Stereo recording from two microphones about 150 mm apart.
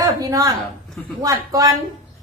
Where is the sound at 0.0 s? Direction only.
25° right (ahead or behind).